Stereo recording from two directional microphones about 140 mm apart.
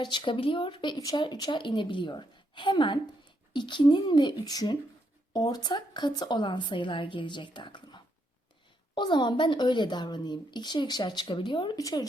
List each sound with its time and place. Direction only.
0.0 s speech: 35° left (ahead or behind)
9.0 s speech: 35° left (ahead or behind)
11.8 s speech: 25° left (ahead or behind)